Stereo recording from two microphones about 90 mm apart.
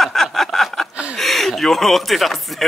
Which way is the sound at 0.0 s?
5° left (ahead or behind).